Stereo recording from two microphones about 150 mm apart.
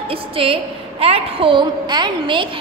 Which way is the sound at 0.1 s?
35° right (ahead or behind).